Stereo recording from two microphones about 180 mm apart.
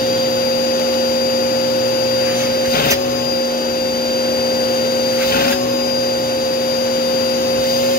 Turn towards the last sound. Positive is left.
turn(degrees=55)  # may be behind; listen again after turning